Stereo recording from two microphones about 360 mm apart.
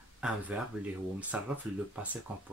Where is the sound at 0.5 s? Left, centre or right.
Centre.